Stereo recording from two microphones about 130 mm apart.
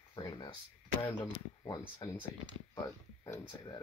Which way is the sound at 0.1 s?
35° left (ahead or behind).